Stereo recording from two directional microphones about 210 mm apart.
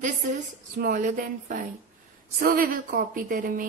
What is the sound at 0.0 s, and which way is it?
Speech, 40° right (ahead or behind).